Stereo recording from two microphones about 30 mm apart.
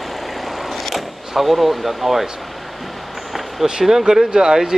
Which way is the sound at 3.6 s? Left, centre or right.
Centre.